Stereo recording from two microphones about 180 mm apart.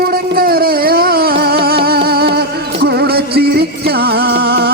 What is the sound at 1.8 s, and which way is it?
Music, 60° right (ahead or behind).